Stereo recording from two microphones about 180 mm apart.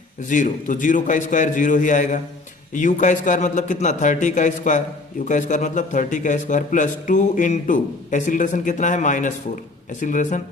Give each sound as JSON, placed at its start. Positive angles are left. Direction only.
{"t": 0.3, "sound": "a man's voice", "side_deg": 45}